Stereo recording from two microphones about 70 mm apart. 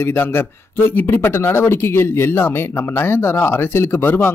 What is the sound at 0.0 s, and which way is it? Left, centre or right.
Speech, left.